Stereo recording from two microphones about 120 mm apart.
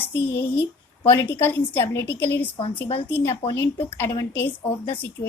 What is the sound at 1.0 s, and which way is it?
A woman's voice, 20° left (ahead or behind).